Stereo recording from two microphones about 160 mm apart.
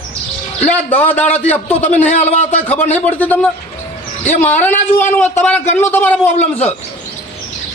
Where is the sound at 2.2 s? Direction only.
45° left (ahead or behind).